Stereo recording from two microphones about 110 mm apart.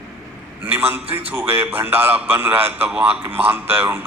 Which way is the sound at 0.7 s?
20° right (ahead or behind).